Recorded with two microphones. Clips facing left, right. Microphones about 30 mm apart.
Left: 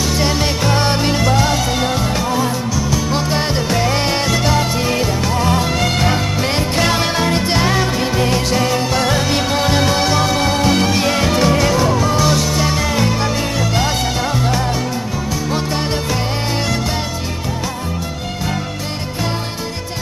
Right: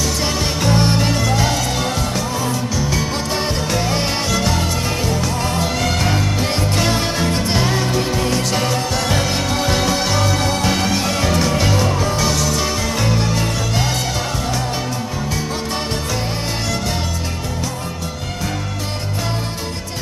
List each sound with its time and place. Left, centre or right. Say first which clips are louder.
0.0 s music: left 3 dB; centre
11.5 s music: left 3 dB; centre
12.3 s music: left 3 dB; centre